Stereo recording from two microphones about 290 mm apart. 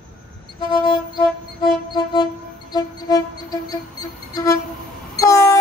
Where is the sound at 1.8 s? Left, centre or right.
Centre.